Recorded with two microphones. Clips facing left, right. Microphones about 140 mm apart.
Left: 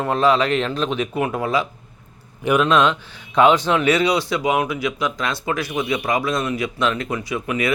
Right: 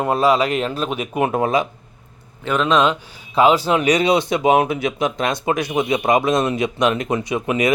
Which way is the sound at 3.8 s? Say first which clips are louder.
Right 2 dB; 20° right (ahead or behind).